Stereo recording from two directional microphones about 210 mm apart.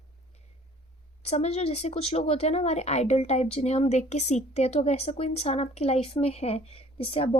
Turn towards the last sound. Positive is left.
turn(degrees=25)  # may be behind; listen again after turning